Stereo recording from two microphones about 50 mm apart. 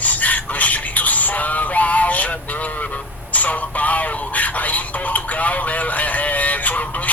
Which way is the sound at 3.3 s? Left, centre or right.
Left.